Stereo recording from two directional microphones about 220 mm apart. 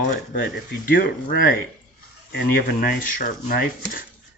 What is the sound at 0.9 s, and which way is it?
Speech, 40° left (ahead or behind).